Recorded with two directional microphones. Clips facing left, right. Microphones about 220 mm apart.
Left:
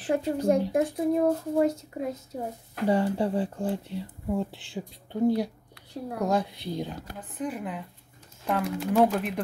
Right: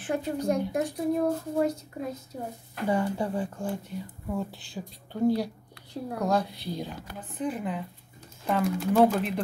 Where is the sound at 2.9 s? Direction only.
35° left (ahead or behind).